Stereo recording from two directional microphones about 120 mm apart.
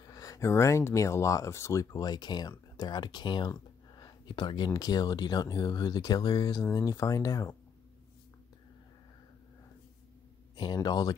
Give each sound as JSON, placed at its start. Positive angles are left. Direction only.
{"t": 0.0, "sound": "speech", "side_deg": 30}
{"t": 10.5, "sound": "speech", "side_deg": 40}